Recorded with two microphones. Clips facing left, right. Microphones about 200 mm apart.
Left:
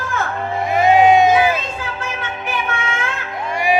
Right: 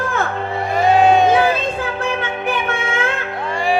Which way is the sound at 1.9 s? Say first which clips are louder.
Right 5 dB; 60° right (ahead or behind).